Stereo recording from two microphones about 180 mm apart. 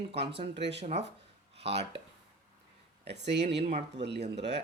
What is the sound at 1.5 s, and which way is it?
Speech, 35° right (ahead or behind).